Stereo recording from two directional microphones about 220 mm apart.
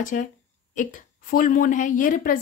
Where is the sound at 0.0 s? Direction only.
35° left (ahead or behind).